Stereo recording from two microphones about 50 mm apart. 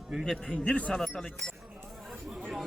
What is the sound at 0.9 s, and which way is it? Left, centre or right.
Speech, centre.